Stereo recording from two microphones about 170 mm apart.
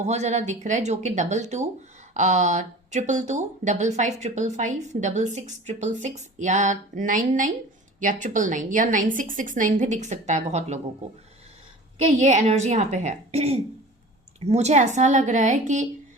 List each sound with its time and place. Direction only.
0.0 s speech: 40° right (ahead or behind)
12.2 s speech: 40° right (ahead or behind)